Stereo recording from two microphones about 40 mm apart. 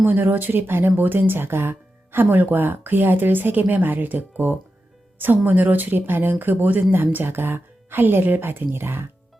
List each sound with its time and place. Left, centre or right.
0.1 s speech: right
0.7 s speech: right
2.1 s speech: right